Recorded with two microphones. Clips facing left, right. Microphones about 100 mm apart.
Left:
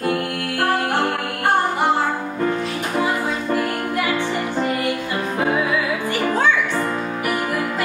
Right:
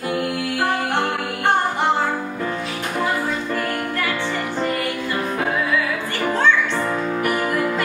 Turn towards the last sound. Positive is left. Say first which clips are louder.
# right 2 dB
turn(degrees=5)  # may be behind; listen again after turning